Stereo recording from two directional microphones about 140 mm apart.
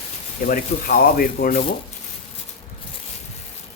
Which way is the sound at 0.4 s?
90° left.